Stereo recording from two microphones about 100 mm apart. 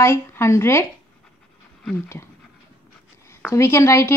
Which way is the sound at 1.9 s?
25° left (ahead or behind).